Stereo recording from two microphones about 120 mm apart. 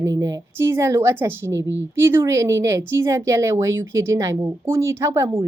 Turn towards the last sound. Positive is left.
turn(degrees=-25)  # may be behind; listen again after turning